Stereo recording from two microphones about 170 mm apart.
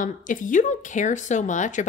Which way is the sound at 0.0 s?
50° left (ahead or behind).